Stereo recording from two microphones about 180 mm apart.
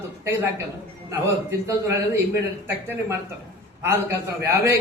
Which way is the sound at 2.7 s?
10° right (ahead or behind).